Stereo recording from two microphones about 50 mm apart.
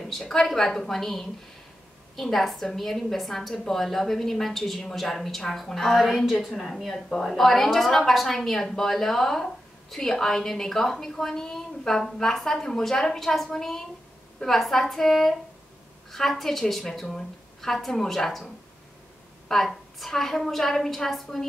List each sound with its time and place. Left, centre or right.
0.1 s a woman's voice: centre